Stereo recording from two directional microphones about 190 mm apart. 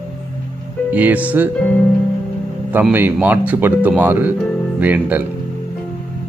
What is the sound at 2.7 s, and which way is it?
Speech, 10° right (ahead or behind).